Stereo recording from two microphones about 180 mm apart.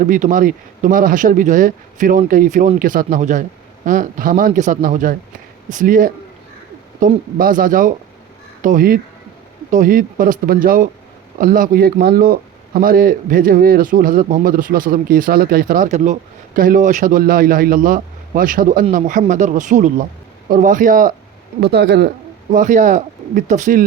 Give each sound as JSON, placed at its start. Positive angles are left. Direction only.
{"t": 0.0, "sound": "a man's voice", "side_deg": -45}
{"t": 21.6, "sound": "speech", "side_deg": -65}
{"t": 22.5, "sound": "a man's voice", "side_deg": -45}